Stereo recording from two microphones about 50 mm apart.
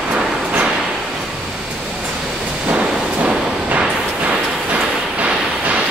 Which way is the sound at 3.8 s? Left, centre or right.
Right.